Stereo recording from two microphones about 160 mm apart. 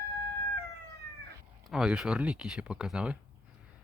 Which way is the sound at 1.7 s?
5° right (ahead or behind).